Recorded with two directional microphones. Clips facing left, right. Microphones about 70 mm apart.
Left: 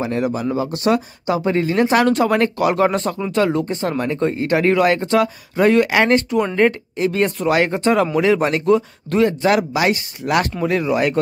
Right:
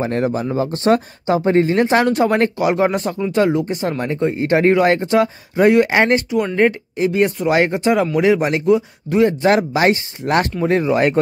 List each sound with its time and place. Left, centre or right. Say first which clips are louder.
0.0 s speech: right 1 dB; right; by 7.4 s centre
7.4 s speech: left 1 dB; right
9.4 s speech: right 2 dB; right